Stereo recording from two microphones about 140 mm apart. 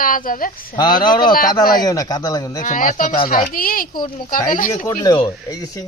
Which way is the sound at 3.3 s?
85° left.